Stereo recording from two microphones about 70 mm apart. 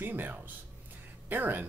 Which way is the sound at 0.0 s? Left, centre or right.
Right.